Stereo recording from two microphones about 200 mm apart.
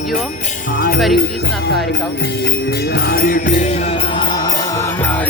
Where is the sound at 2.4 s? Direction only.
55° left (ahead or behind).